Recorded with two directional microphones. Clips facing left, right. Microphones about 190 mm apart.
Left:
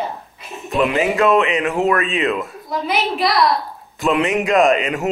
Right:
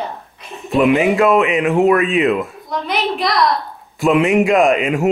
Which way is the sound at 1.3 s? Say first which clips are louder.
Right 2 dB; centre (ahead or behind).